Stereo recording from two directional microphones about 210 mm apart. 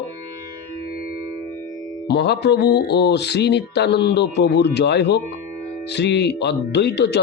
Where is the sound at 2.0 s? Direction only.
55° left (ahead or behind).